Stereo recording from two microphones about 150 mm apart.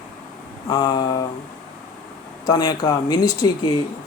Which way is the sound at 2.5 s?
25° left (ahead or behind).